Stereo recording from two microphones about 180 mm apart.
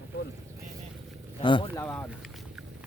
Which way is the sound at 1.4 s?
25° left (ahead or behind).